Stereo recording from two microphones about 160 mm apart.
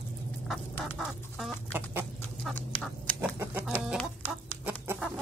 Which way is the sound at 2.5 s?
10° left (ahead or behind).